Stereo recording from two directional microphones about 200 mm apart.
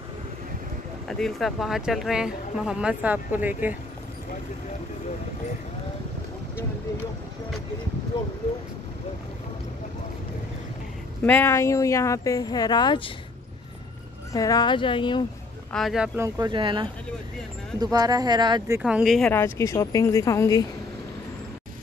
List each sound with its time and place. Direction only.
1.0 s speech: centre (ahead or behind)
8.1 s speech: 25° left (ahead or behind)
11.2 s speech: 10° left (ahead or behind)
14.3 s speech: 20° left (ahead or behind)
15.7 s speech: centre (ahead or behind)
16.2 s speech: 20° right (ahead or behind)
17.9 s speech: 20° right (ahead or behind)
18.8 s speech: 5° right (ahead or behind)
19.6 s speech: 15° left (ahead or behind)